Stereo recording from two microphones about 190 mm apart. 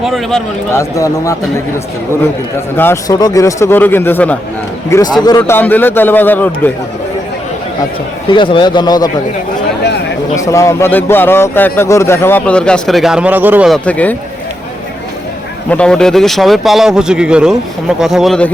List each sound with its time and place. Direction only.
0.0 s speech: centre (ahead or behind)
0.7 s a man's voice: 15° left (ahead or behind)
2.7 s a man's voice: 15° left (ahead or behind)
5.4 s a man's voice: 10° left (ahead or behind)
8.3 s speech: 25° left (ahead or behind)
10.3 s a man's voice: 15° left (ahead or behind)
15.7 s speech: 5° left (ahead or behind)